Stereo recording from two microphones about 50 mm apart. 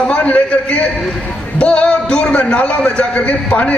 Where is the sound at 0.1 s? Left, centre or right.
Left.